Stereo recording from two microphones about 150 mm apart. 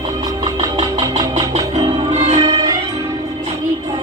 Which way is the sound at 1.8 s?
40° right (ahead or behind).